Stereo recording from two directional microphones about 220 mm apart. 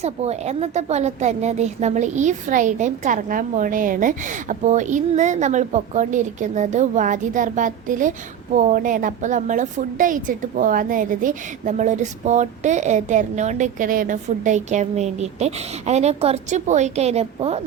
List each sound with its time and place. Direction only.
0.0 s a woman's voice: 30° right (ahead or behind)